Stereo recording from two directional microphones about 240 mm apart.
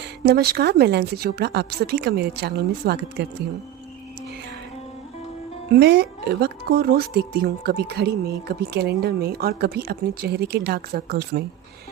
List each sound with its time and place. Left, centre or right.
0.0 s a woman's voice: right
5.7 s speech: right